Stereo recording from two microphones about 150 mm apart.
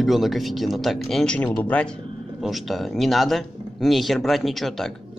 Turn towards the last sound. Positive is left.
turn(degrees=0)  # may be behind; listen again after turning